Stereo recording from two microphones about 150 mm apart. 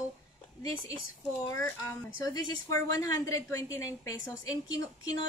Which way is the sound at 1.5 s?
15° left (ahead or behind).